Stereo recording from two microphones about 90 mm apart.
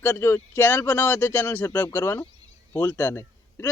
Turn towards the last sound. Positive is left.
turn(degrees=30)  # may be behind; listen again after turning